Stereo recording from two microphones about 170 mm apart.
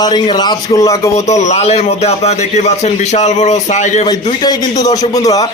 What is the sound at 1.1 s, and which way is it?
A man's voice, 45° left (ahead or behind).